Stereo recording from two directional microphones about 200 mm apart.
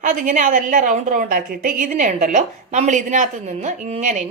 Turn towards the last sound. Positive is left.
turn(degrees=-35)  # may be behind; listen again after turning